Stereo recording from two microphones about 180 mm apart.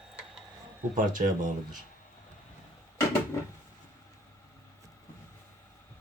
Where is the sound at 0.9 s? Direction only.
45° right (ahead or behind).